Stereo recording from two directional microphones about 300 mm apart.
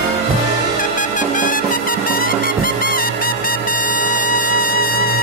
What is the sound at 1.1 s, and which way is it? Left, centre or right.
Music, left.